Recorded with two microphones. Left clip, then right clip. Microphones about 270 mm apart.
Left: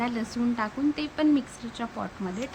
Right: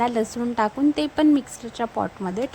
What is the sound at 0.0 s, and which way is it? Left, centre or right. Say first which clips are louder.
Speech: right 7 dB; right.